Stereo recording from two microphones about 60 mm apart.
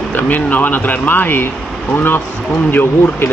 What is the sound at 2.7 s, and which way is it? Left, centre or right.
Speech, left.